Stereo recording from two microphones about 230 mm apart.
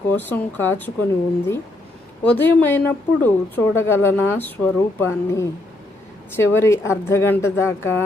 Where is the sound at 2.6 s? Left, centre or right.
Centre.